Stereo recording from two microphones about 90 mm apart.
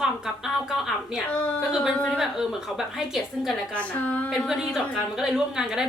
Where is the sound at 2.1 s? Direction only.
5° right (ahead or behind).